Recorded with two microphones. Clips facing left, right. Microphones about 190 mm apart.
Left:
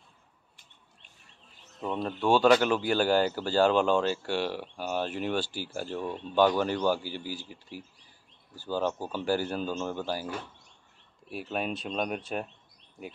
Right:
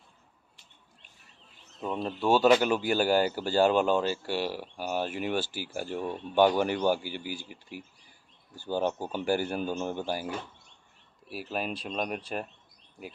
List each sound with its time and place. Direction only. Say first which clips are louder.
1.8 s speech: even; 5° right (ahead or behind)
8.5 s speech: right 1 dB; 15° right (ahead or behind); by 12.2 s centre (ahead or behind)